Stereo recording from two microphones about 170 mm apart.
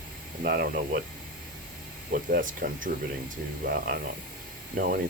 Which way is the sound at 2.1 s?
55° right (ahead or behind).